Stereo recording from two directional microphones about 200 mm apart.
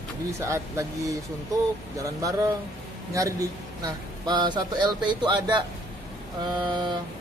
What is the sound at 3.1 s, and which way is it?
A man's voice, 15° right (ahead or behind).